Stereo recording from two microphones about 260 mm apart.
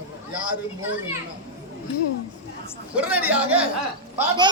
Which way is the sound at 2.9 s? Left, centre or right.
Centre.